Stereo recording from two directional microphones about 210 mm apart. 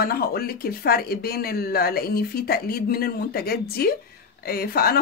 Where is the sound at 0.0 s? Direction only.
45° left (ahead or behind).